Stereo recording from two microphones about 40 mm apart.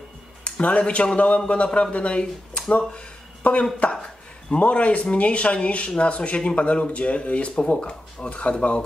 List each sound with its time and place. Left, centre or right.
0.4 s speech: left